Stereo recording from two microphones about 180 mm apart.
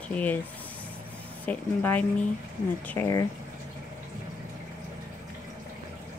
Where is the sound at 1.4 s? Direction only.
10° left (ahead or behind).